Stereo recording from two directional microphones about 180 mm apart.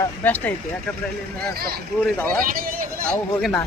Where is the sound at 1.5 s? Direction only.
60° right (ahead or behind).